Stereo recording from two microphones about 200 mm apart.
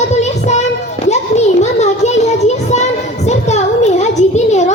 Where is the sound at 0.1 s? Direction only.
35° left (ahead or behind).